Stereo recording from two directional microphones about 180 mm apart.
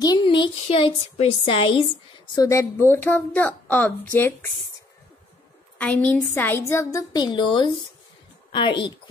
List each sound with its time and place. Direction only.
0.0 s a woman's voice: 25° left (ahead or behind)
2.3 s a woman's voice: 20° left (ahead or behind)
5.8 s a woman's voice: 5° left (ahead or behind); by 8.9 s 25° left (ahead or behind)